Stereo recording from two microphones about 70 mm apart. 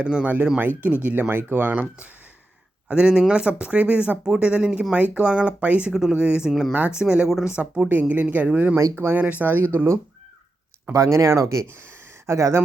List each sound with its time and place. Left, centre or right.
0.0 s speech: centre
1.3 s speech: right; by 6.5 s centre
6.5 s speech: centre
6.7 s speech: centre
7.3 s speech: centre
7.5 s speech: right
10.9 s speech: right